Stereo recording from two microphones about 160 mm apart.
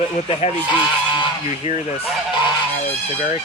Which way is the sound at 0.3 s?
35° left (ahead or behind).